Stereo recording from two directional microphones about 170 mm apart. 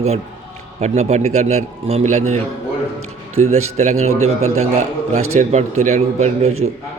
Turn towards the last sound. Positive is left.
turn(degrees=-40)  # may be behind; listen again after turning